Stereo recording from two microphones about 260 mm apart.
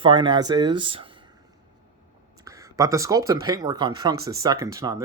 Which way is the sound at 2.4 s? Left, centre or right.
Centre.